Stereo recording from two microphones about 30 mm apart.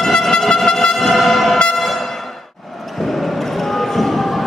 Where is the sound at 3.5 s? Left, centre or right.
Centre.